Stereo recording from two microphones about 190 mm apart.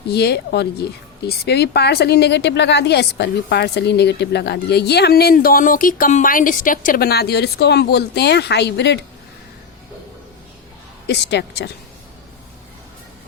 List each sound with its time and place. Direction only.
0.1 s speech: 60° left (ahead or behind)
11.0 s a woman's voice: 65° left (ahead or behind)